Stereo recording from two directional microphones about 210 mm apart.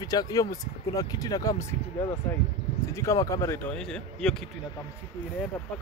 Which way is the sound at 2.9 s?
15° left (ahead or behind).